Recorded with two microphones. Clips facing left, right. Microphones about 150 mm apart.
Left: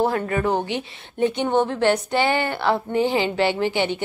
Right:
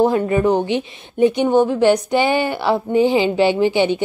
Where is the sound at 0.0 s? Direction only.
20° right (ahead or behind).